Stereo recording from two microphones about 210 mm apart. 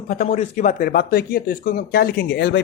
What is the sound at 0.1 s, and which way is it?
Speech, 40° left (ahead or behind).